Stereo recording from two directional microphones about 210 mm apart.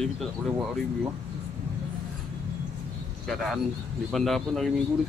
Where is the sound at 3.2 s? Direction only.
Centre (ahead or behind).